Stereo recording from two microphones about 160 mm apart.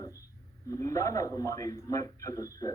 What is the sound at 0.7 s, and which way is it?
A woman's voice, 20° left (ahead or behind).